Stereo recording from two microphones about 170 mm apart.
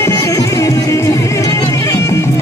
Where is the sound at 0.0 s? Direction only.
20° left (ahead or behind).